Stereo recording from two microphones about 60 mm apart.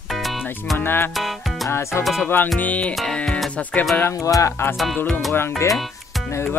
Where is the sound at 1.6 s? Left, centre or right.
Left.